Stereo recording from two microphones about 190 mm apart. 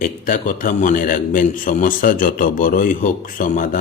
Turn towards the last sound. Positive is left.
turn(degrees=45)  # may be behind; listen again after turning